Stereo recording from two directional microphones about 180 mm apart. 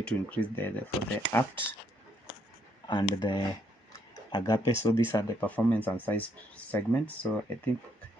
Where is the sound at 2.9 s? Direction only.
25° left (ahead or behind); by 7.7 s 10° left (ahead or behind).